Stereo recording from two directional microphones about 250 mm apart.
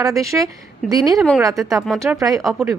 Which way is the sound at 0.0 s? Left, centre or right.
Centre.